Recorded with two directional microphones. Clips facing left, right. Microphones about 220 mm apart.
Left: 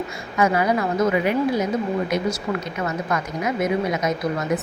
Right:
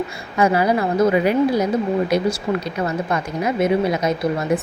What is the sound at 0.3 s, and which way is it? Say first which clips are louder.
Speech: right 3 dB; 30° right (ahead or behind).